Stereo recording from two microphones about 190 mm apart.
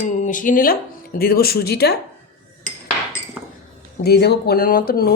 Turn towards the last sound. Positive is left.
turn(degrees=55)  # may be behind; listen again after turning